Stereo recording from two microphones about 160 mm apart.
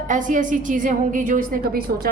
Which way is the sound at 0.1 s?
55° right (ahead or behind).